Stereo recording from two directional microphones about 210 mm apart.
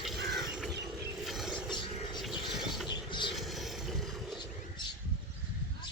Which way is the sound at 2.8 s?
20° left (ahead or behind).